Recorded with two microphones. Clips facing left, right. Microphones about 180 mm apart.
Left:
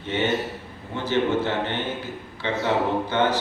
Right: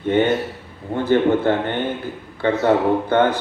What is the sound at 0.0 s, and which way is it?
A man's voice, 55° right (ahead or behind).